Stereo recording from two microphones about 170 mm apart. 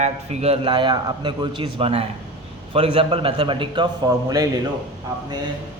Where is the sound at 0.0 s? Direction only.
40° right (ahead or behind); by 4.4 s 20° right (ahead or behind).